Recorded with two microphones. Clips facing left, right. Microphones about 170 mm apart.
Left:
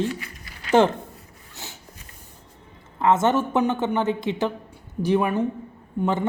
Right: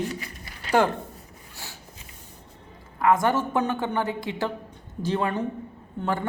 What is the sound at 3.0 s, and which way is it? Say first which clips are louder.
A man's voice: left 2 dB; 25° left (ahead or behind).